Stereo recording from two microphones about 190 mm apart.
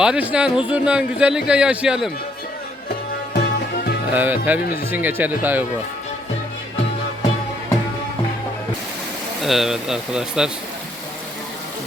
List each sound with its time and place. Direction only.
0.0 s a man's voice: 5° right (ahead or behind)
3.3 s music: 55° left (ahead or behind)
4.1 s speech: 10° right (ahead or behind)
9.4 s a man's voice: centre (ahead or behind)